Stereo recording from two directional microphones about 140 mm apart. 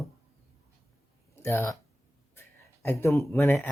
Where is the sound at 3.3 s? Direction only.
15° left (ahead or behind).